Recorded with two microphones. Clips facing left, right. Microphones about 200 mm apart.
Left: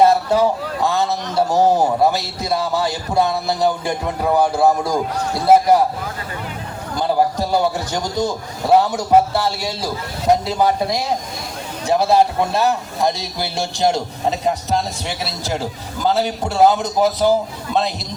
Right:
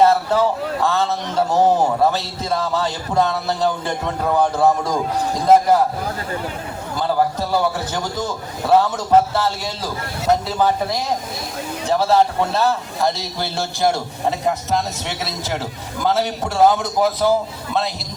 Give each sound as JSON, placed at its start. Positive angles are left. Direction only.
{"t": 0.0, "sound": "a man's voice", "side_deg": 15}
{"t": 6.9, "sound": "a man's voice", "side_deg": 15}
{"t": 16.1, "sound": "a man's voice", "side_deg": 15}